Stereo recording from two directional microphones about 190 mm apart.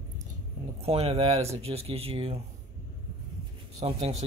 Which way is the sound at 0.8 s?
30° right (ahead or behind).